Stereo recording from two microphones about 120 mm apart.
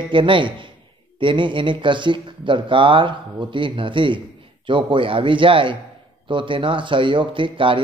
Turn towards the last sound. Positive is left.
turn(degrees=-45)  # may be behind; listen again after turning